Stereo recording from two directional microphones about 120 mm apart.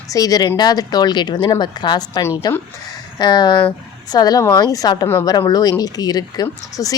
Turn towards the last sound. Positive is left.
turn(degrees=30)  # may be behind; listen again after turning